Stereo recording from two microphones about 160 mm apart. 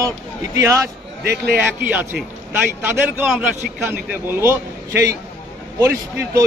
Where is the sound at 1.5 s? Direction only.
10° right (ahead or behind).